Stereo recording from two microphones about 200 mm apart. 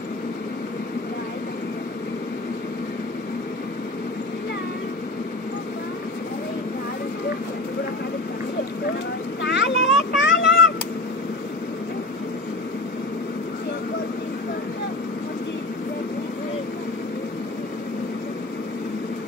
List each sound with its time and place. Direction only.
9.4 s vehicle: 60° left (ahead or behind)